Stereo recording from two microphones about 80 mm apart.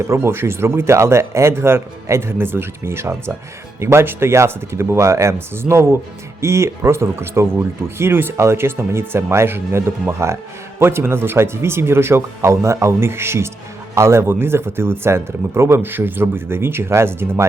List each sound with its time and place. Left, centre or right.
0.0 s speech: right